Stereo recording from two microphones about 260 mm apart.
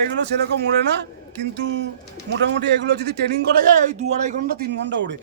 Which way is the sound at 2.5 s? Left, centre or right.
Right.